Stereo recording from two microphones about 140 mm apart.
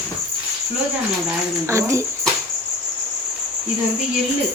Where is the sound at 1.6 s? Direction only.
20° right (ahead or behind).